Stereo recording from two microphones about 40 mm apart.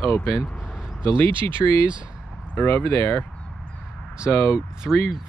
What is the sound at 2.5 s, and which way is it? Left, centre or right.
Speech, left.